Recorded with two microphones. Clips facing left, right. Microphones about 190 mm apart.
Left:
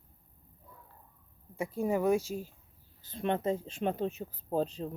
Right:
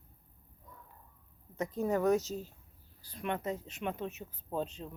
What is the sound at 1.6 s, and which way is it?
Speech, 10° left (ahead or behind).